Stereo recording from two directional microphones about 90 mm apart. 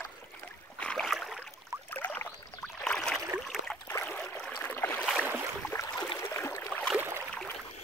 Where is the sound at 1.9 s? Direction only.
20° left (ahead or behind).